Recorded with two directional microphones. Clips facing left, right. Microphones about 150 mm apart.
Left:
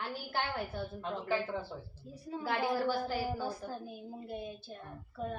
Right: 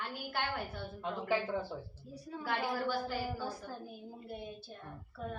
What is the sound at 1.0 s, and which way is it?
Speech, 10° right (ahead or behind).